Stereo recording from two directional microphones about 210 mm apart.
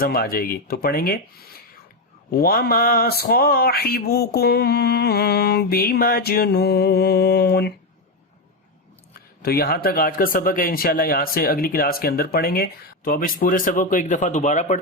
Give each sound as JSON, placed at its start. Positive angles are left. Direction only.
{"t": 0.0, "sound": "speech", "side_deg": 45}
{"t": 9.4, "sound": "speech", "side_deg": 45}